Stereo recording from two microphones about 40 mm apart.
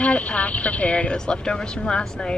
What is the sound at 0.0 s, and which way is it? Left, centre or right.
Speech, left.